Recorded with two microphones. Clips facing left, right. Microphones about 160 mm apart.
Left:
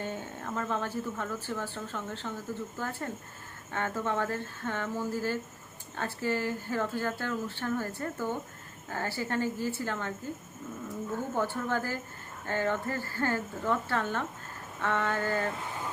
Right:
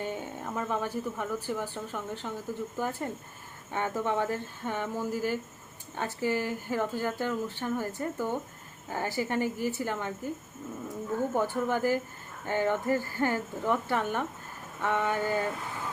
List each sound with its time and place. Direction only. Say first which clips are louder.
0.0 s speech: right 2 dB; 15° right (ahead or behind)
11.3 s speech: right 1 dB; 15° right (ahead or behind)